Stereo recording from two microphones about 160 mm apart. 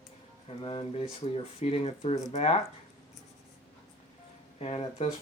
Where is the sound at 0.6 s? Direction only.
35° left (ahead or behind).